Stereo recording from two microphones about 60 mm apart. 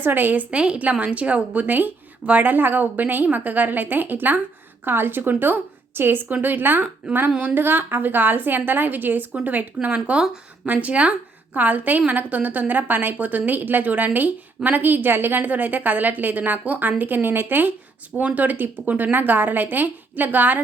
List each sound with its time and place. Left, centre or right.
0.0 s a woman's voice: right
0.5 s a woman's voice: centre